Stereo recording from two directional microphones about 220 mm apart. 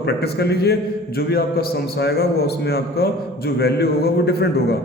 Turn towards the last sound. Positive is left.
turn(degrees=45)  # may be behind; listen again after turning